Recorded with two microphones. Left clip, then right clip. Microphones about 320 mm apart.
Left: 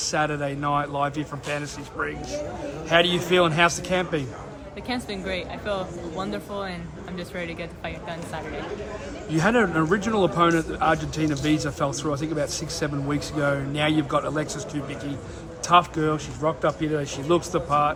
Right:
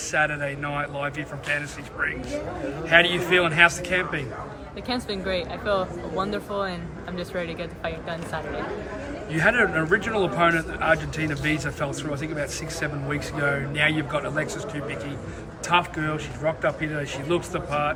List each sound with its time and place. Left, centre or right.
0.1 s a man's voice: centre
4.9 s speech: centre
9.3 s a man's voice: centre
15.7 s a man's voice: centre